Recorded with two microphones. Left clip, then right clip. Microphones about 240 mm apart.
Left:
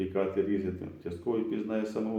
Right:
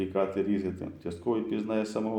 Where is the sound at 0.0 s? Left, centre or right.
Right.